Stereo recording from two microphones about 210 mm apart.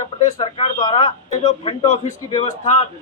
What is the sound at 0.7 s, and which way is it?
A man's voice, 20° left (ahead or behind).